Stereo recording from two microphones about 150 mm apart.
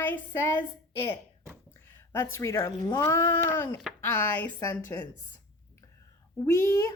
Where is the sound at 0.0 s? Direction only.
15° left (ahead or behind).